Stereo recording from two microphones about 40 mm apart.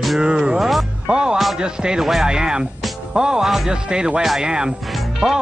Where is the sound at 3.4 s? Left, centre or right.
Centre.